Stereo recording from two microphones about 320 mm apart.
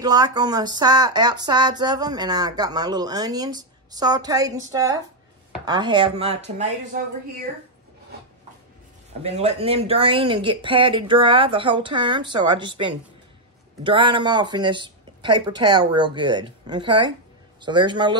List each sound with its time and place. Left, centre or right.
0.0 s speech: centre
9.2 s speech: centre